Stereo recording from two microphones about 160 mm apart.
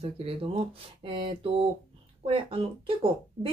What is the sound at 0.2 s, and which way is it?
Speech, 35° right (ahead or behind).